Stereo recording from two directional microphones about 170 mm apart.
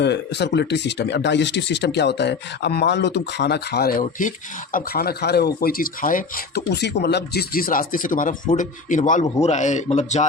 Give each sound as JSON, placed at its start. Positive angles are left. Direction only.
{"t": 0.0, "sound": "speech", "side_deg": 85}
{"t": 4.0, "sound": "speech", "side_deg": 50}